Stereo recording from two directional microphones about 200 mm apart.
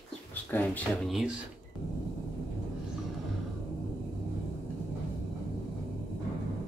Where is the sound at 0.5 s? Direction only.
5° left (ahead or behind).